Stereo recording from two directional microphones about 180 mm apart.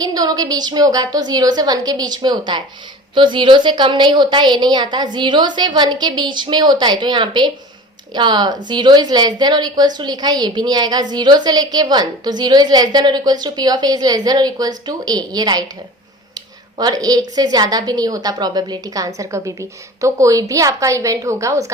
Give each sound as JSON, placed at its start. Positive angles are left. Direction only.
{"t": 0.0, "sound": "a woman's voice", "side_deg": -20}
{"t": 16.7, "sound": "a woman's voice", "side_deg": -20}